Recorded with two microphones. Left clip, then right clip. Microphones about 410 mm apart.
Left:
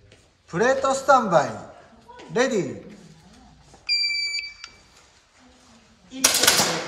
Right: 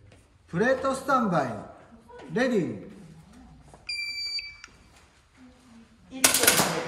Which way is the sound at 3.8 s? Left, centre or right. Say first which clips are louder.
Left 9 dB; centre.